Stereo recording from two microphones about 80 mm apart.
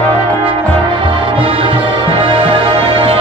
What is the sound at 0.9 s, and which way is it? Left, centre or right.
Music, right.